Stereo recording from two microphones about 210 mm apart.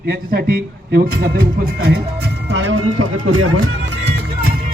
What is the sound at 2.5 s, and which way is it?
Speech, 65° right (ahead or behind).